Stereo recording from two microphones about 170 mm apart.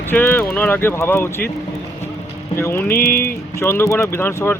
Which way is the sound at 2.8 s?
60° left (ahead or behind).